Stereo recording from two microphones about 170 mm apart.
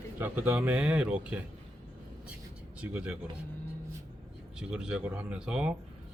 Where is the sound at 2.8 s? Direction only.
5° right (ahead or behind).